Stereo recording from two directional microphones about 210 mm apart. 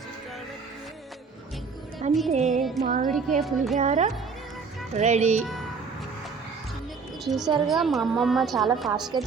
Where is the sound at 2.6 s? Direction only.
Centre (ahead or behind).